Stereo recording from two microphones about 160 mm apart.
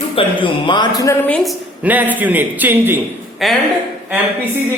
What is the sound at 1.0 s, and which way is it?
Speech, 20° left (ahead or behind).